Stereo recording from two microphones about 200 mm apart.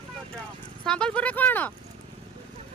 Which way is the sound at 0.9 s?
5° left (ahead or behind).